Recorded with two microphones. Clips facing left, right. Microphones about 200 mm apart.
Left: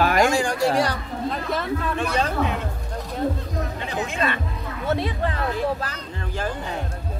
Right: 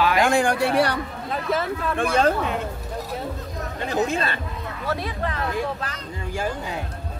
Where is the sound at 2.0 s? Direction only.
50° right (ahead or behind).